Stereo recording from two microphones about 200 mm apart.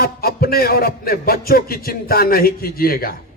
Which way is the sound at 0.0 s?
50° left (ahead or behind).